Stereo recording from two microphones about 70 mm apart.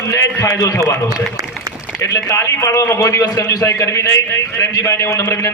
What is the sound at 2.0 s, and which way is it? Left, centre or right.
A man's voice, left.